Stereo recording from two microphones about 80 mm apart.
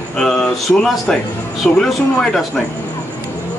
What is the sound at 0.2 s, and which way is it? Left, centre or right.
A man's voice, centre.